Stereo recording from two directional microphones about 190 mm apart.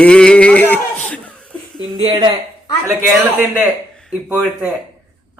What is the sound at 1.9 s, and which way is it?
Speech, 25° right (ahead or behind).